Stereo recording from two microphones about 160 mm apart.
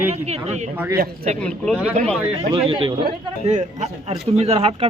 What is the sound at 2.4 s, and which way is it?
Speech, 35° right (ahead or behind).